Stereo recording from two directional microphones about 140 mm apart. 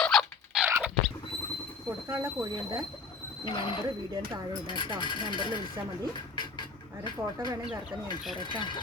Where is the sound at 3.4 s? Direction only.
35° left (ahead or behind).